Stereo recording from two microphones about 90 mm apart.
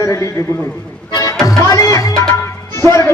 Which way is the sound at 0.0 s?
35° left (ahead or behind).